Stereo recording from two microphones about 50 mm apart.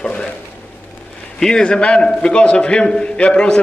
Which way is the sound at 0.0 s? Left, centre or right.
Centre.